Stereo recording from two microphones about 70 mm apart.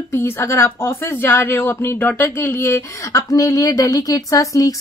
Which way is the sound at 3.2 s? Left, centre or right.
Left.